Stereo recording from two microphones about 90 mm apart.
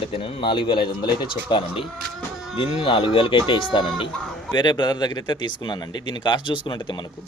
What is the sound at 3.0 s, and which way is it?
A man's voice, 70° left (ahead or behind).